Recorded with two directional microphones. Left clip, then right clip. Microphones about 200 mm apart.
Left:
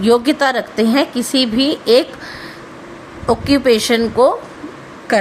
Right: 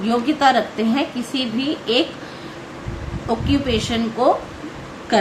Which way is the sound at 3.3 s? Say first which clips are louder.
Left 8 dB; 55° left (ahead or behind).